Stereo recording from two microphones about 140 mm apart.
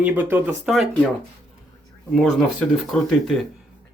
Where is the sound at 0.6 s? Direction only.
Centre (ahead or behind).